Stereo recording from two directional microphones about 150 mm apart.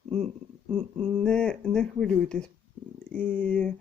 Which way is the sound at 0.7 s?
5° left (ahead or behind).